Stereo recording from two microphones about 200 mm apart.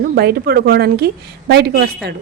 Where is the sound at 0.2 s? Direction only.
50° right (ahead or behind).